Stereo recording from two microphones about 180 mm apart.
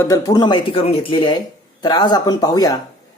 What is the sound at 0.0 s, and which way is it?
Speech, 20° left (ahead or behind).